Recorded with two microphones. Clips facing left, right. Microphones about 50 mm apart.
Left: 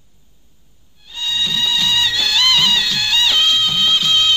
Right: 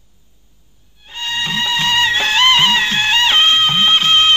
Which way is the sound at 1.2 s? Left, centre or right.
Right.